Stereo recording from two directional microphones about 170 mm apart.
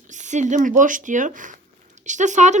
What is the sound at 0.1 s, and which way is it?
Speech, 45° right (ahead or behind).